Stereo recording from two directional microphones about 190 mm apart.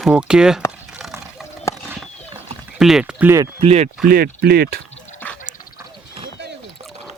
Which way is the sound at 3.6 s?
30° right (ahead or behind).